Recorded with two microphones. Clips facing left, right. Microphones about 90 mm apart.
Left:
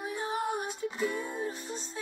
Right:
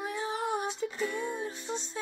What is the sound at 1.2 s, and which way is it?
Music, 40° left (ahead or behind).